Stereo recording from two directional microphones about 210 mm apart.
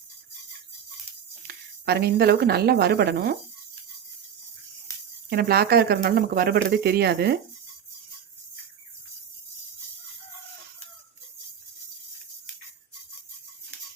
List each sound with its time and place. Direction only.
1.5 s speech: 50° right (ahead or behind)
5.3 s speech: 50° right (ahead or behind)